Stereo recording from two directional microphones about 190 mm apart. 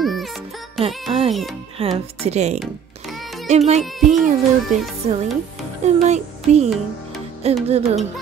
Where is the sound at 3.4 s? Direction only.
35° right (ahead or behind).